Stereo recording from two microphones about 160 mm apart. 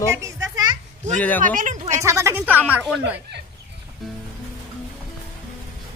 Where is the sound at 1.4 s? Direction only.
55° right (ahead or behind).